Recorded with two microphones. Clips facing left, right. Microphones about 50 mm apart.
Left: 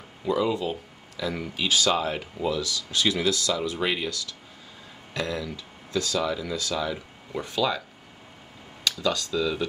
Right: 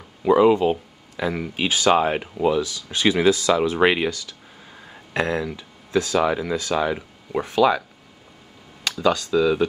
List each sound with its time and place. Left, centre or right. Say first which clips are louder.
0.2 s speech: right 10 dB; right
1.9 s speech: right 7 dB; right
2.4 s speech: right 7 dB; right
3.5 s speech: right 9 dB; right
5.1 s speech: right 7 dB; right
5.6 s a sound: right 6 dB; right
6.4 s speech: right 6 dB; right
8.8 s speech: right 6 dB; right